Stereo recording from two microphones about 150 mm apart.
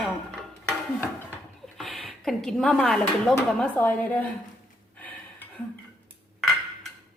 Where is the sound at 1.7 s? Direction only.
5° left (ahead or behind).